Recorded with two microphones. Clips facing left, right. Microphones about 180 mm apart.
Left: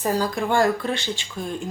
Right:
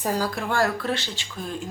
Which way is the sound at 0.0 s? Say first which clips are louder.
Left 3 dB; 5° left (ahead or behind).